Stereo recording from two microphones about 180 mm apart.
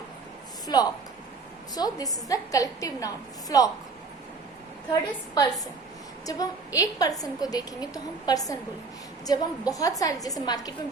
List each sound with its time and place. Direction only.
0.7 s a woman's voice: 20° left (ahead or behind)
5.3 s a woman's voice: 20° left (ahead or behind)